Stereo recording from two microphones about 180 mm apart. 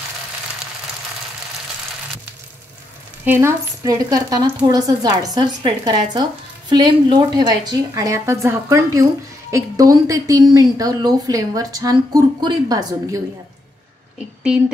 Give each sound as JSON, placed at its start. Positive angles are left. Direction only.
{"t": 3.3, "sound": "a woman's voice", "side_deg": -15}